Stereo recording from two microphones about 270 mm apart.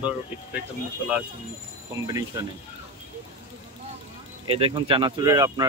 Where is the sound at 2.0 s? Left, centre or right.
Centre.